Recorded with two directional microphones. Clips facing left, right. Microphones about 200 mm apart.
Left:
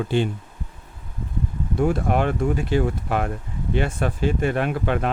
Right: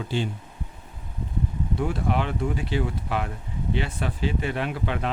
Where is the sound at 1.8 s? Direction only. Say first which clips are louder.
Left 6 dB; 45° left (ahead or behind).